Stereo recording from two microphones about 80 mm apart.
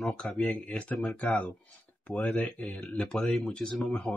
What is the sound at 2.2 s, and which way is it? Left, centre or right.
Speech, centre.